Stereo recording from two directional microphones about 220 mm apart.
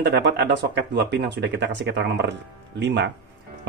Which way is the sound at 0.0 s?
50° right (ahead or behind).